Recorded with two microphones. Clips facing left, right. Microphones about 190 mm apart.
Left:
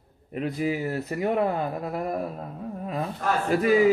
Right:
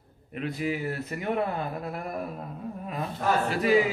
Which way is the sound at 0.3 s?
40° left (ahead or behind).